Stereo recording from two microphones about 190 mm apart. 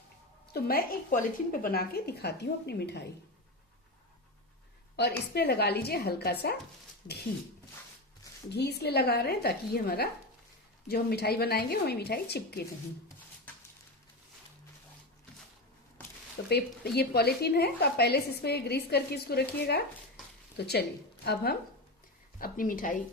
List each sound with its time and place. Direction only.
0.5 s a woman's voice: 50° left (ahead or behind)
4.9 s a woman's voice: 60° left (ahead or behind)
8.4 s a woman's voice: 60° left (ahead or behind)
16.5 s a woman's voice: 55° left (ahead or behind)
22.4 s a woman's voice: 50° left (ahead or behind)